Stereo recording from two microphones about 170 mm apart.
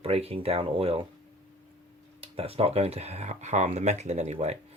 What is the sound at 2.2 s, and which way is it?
Speech, 35° right (ahead or behind).